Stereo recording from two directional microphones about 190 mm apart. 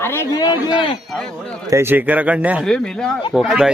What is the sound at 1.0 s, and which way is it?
Speech, centre (ahead or behind).